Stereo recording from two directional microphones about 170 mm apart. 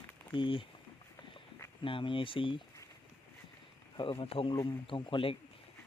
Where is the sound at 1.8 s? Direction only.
30° left (ahead or behind).